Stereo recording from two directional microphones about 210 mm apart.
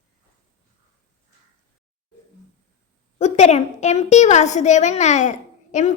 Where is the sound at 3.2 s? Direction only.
30° left (ahead or behind).